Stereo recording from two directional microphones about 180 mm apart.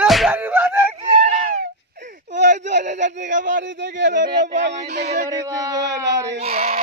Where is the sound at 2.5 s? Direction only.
45° right (ahead or behind).